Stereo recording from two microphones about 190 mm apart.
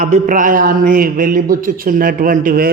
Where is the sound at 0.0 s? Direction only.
45° right (ahead or behind).